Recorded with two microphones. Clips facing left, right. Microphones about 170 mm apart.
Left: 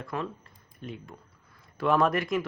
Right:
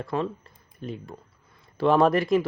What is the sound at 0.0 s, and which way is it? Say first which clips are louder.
Speech: right 6 dB; 30° right (ahead or behind).